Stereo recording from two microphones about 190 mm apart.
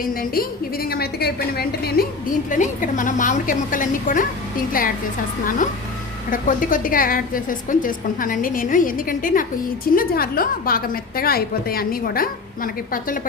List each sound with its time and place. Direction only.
0.0 s a woman's voice: 50° left (ahead or behind)
2.5 s a woman's voice: 40° left (ahead or behind)
6.3 s a woman's voice: 45° left (ahead or behind)